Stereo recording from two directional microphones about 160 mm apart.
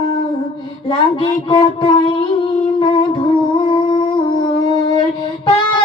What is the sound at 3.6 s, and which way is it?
Humming, 30° left (ahead or behind).